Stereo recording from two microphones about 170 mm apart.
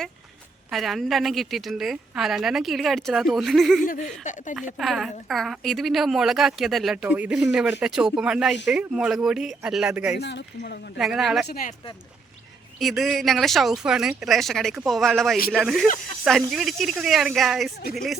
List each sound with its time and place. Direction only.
0.7 s a woman's voice: centre (ahead or behind)
3.8 s speech: 50° left (ahead or behind)
4.8 s a woman's voice: centre (ahead or behind)
10.2 s speech: 80° left
10.9 s a woman's voice: centre (ahead or behind)
11.4 s speech: 60° left (ahead or behind)
12.8 s a woman's voice: centre (ahead or behind)